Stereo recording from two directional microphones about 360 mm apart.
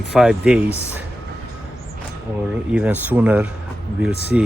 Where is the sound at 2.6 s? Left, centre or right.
Centre.